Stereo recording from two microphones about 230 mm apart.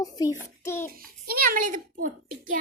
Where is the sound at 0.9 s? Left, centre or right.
Right.